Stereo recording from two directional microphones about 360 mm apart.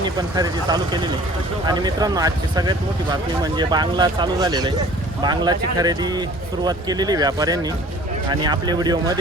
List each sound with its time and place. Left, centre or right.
0.0 s speech: centre